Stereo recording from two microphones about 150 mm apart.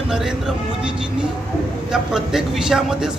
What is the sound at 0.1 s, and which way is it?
Speech, 5° right (ahead or behind).